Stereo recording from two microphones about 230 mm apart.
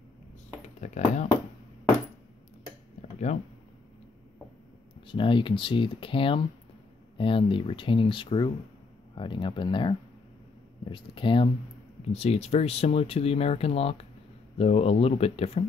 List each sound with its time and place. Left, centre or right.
0.7 s speech: left
3.0 s a sound: left
5.0 s speech: left